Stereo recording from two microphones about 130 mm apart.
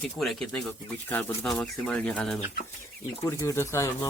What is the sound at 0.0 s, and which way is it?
Speech, centre (ahead or behind).